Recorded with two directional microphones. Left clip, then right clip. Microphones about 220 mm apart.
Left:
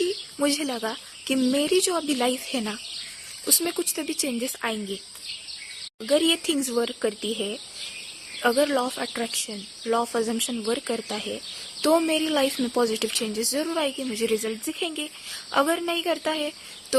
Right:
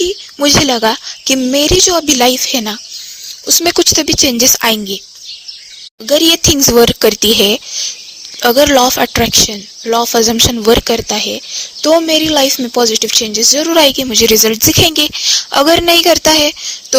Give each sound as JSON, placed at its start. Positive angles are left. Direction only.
{"t": 0.3, "sound": "speech", "side_deg": -40}
{"t": 6.1, "sound": "speech", "side_deg": -40}